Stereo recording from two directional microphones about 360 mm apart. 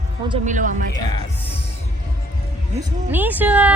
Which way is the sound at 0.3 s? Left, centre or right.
Right.